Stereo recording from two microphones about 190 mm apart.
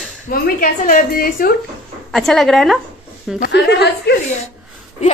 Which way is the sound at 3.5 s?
60° left (ahead or behind).